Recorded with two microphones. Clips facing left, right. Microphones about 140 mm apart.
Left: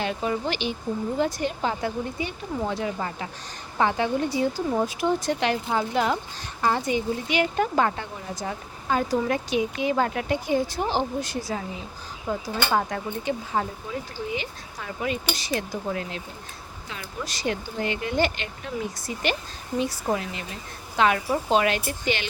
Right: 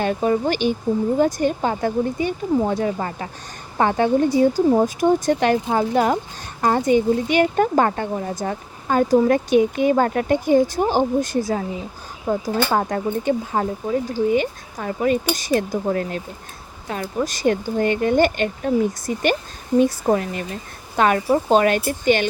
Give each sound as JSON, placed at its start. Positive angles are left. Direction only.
{"t": 0.0, "sound": "speech", "side_deg": -45}